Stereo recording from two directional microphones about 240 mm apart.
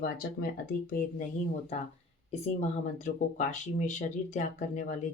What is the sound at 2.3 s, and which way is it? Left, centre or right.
Speech, left.